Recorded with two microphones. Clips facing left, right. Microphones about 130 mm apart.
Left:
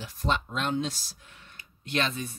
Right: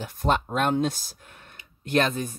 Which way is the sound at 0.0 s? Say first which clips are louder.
Right 5 dB; 50° right (ahead or behind).